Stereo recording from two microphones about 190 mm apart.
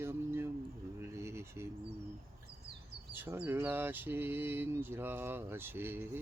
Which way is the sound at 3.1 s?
10° right (ahead or behind).